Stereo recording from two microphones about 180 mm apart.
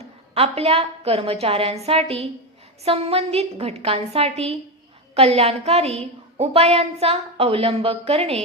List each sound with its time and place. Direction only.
0.3 s a woman's voice: 35° right (ahead or behind)